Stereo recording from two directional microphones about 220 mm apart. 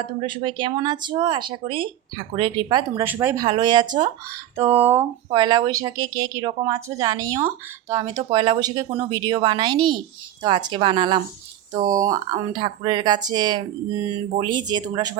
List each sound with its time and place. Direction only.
0.0 s speech: 25° right (ahead or behind)